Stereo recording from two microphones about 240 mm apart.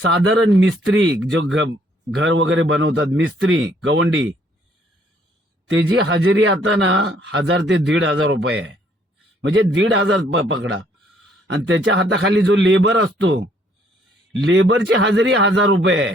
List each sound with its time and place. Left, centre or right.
0.0 s a man's voice: right
5.7 s a man's voice: right
14.4 s a man's voice: right